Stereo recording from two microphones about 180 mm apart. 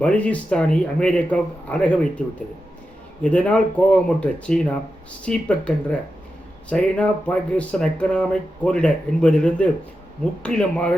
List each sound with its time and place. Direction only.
0.0 s a man's voice: 5° left (ahead or behind)
3.2 s a man's voice: 5° left (ahead or behind)